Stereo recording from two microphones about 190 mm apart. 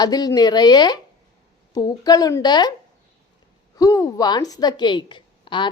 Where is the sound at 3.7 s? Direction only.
20° left (ahead or behind).